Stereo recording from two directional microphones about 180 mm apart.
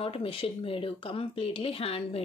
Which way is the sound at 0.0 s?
30° left (ahead or behind).